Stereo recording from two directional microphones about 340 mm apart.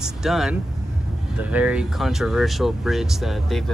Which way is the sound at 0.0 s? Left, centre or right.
Centre.